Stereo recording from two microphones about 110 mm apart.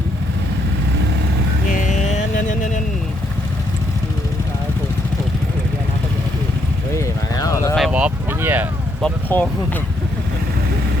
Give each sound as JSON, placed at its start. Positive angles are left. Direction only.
{"t": 7.0, "sound": "clip-clop", "side_deg": 30}
{"t": 7.9, "sound": "a sound", "side_deg": -15}
{"t": 9.3, "sound": "speech", "side_deg": 20}